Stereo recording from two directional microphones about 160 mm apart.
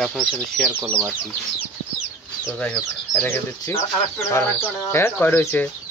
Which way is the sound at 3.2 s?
15° left (ahead or behind).